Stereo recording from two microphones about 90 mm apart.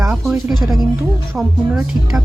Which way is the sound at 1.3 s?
15° right (ahead or behind).